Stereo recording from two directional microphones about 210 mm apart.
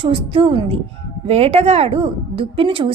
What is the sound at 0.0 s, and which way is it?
A woman's voice, 25° right (ahead or behind).